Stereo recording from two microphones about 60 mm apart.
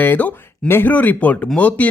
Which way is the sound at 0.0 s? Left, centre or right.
Left.